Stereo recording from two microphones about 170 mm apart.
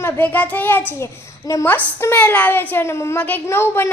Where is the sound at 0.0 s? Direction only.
10° left (ahead or behind).